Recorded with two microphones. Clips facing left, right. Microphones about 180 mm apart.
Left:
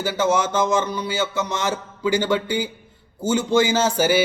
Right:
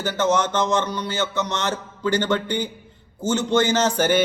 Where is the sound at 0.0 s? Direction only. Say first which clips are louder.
Even; 10° left (ahead or behind).